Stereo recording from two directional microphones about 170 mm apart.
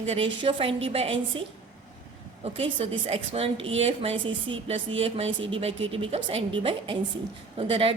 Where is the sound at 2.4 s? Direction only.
35° right (ahead or behind).